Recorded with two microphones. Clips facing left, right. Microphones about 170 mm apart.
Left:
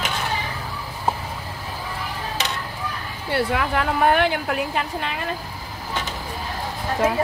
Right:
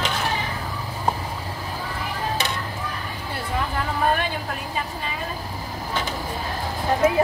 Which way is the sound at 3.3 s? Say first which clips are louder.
Left 6 dB; 80° left.